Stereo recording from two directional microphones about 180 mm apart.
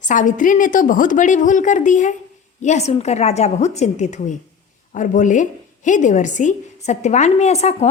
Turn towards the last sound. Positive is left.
turn(degrees=40)  # may be behind; listen again after turning